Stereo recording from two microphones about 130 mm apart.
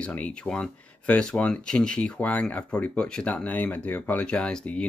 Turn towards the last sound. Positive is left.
turn(degrees=10)  # may be behind; listen again after turning